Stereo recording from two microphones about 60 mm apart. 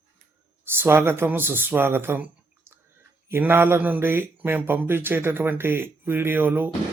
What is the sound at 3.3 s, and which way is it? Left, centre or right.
Speech, right.